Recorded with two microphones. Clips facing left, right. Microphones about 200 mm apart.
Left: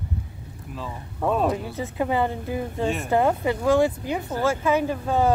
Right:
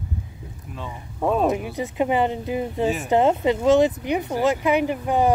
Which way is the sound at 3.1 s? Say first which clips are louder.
Right 3 dB; 20° right (ahead or behind).